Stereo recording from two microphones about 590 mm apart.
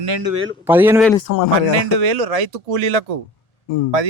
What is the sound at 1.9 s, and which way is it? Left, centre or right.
Speech, right.